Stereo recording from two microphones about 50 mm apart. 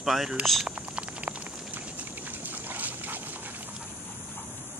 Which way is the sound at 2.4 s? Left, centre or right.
Right.